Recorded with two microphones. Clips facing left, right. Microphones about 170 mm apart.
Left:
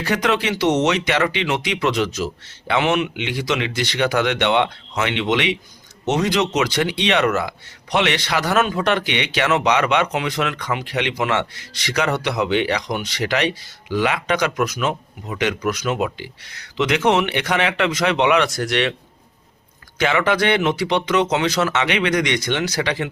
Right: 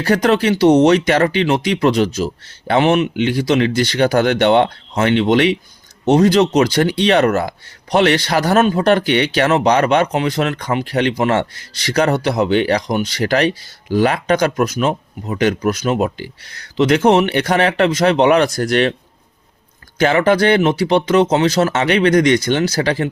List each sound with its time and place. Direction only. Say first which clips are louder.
0.0 s speech: right 6 dB; 40° right (ahead or behind)
20.0 s speech: right 5 dB; 40° right (ahead or behind)